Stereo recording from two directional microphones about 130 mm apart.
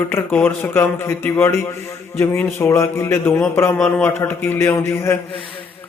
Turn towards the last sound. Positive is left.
turn(degrees=20)  # may be behind; listen again after turning